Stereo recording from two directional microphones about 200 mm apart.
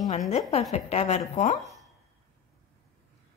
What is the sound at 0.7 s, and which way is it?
A woman's voice, 35° left (ahead or behind).